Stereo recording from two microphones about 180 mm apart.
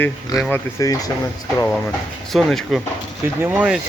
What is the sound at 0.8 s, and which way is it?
Speech, 20° left (ahead or behind).